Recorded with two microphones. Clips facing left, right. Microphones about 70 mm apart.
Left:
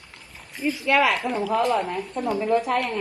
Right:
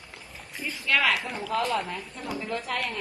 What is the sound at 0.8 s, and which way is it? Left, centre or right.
Speech, centre.